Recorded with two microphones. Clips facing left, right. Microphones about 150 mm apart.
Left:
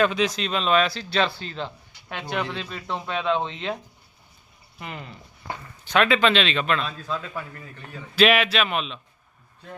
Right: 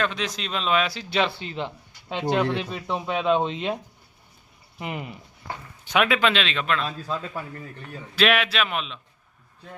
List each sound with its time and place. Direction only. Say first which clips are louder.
0.0 s a man's voice: left 5 dB; 5° left (ahead or behind); by 3.8 s 15° right (ahead or behind)
4.8 s a man's voice: right 4 dB; 20° right (ahead or behind); by 6.8 s centre (ahead or behind)
8.1 s speech: left 3 dB; centre (ahead or behind)